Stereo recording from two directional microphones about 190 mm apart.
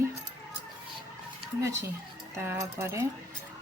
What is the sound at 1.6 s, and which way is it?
Speech, 15° right (ahead or behind).